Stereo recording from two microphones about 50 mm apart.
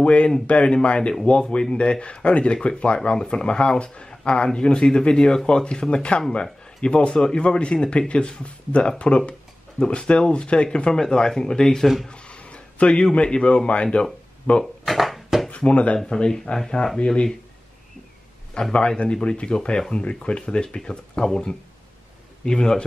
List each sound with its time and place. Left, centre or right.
0.0 s speech: left; by 11.9 s centre
12.1 s a sound: left
13.1 s speech: left
14.6 s a sound: centre
15.5 s speech: left
16.2 s speech: centre
18.5 s speech: centre